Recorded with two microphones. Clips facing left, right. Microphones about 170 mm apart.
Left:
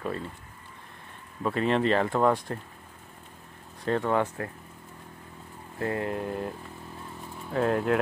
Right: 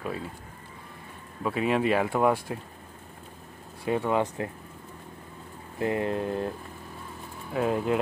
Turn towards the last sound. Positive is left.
turn(degrees=-5)  # may be behind; listen again after turning